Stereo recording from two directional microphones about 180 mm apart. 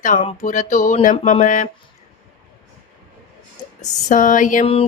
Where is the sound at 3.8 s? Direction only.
45° left (ahead or behind).